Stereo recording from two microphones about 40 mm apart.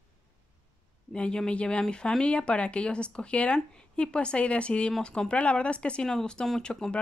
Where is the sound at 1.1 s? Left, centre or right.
Left.